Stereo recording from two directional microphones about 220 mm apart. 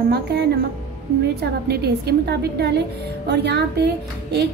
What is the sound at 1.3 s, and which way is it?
A woman's voice, 45° right (ahead or behind).